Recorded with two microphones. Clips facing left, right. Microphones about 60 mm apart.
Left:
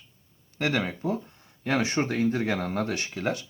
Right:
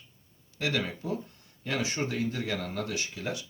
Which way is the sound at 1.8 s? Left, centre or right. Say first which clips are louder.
Left 4 dB; left.